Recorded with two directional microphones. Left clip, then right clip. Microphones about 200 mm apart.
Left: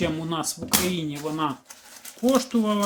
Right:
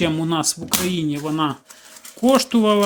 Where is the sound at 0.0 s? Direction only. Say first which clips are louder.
Right 6 dB; 40° right (ahead or behind).